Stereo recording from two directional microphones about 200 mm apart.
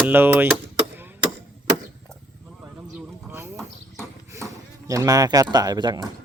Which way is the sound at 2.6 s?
10° right (ahead or behind).